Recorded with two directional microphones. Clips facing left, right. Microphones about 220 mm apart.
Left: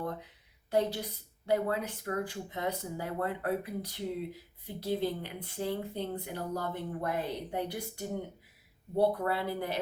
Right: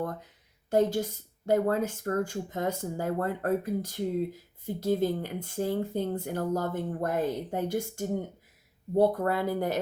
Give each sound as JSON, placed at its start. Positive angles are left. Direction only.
{"t": 0.7, "sound": "speech", "side_deg": -45}